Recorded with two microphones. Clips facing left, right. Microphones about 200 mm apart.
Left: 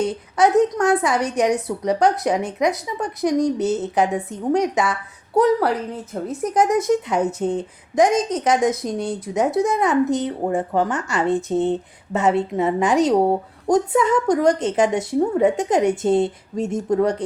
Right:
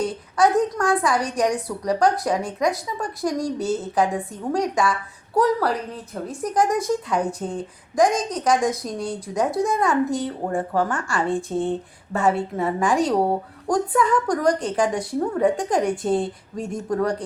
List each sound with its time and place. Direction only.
0.0 s a woman's voice: 20° left (ahead or behind)